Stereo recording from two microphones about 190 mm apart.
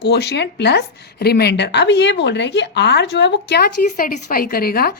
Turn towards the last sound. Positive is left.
turn(degrees=50)  # may be behind; listen again after turning